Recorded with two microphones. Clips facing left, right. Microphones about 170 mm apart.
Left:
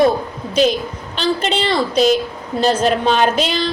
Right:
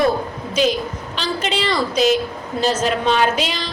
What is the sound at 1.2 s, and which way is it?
A woman's voice, 35° left (ahead or behind).